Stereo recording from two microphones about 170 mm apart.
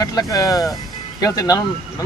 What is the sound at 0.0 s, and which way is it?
Speech, 20° left (ahead or behind).